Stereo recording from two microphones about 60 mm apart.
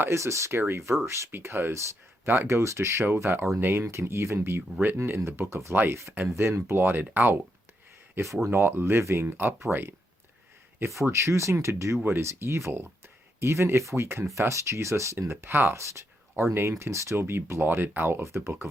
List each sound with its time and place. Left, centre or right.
0.1 s speech: right
2.5 s speech: right
8.2 s speech: right
10.8 s speech: right
15.7 s speech: right
18.2 s speech: right